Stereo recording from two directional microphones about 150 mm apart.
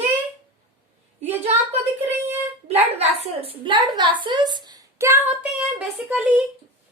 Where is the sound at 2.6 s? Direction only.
45° right (ahead or behind); by 6.4 s 10° right (ahead or behind).